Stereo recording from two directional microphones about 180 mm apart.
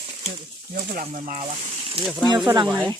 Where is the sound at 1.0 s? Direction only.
45° right (ahead or behind).